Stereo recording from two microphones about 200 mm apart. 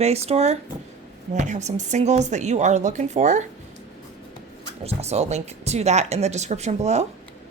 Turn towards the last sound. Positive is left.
turn(degrees=-35)  # may be behind; listen again after turning